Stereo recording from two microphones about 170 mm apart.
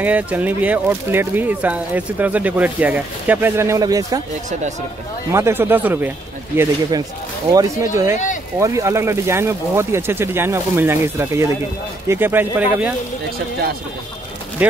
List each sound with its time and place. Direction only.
0.0 s speech: 10° right (ahead or behind)
5.3 s speech: 15° right (ahead or behind)
14.6 s speech: 10° right (ahead or behind)